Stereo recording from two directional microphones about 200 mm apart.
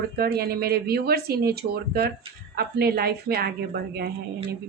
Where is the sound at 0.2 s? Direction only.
50° right (ahead or behind).